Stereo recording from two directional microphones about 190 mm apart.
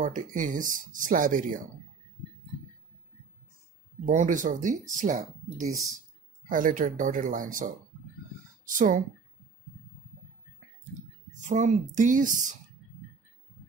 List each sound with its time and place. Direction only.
0.0 s speech: 45° right (ahead or behind)
4.0 s speech: 40° right (ahead or behind)
8.7 s speech: 45° right (ahead or behind)
11.4 s speech: 40° right (ahead or behind)